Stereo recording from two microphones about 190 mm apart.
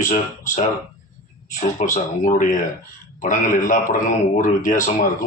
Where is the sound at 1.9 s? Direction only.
45° left (ahead or behind).